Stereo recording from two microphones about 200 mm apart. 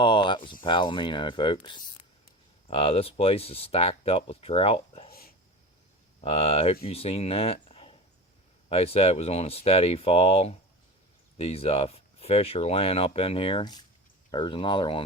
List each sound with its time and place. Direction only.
0.0 s speech: 25° left (ahead or behind)
6.2 s speech: 30° left (ahead or behind)